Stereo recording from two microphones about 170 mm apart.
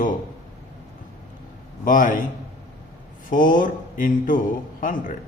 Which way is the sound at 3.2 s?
50° left (ahead or behind).